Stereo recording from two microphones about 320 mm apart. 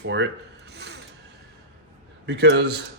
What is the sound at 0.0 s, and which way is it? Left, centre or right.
Speech, right.